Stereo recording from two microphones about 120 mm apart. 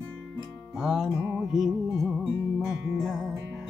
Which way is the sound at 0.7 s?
5° right (ahead or behind).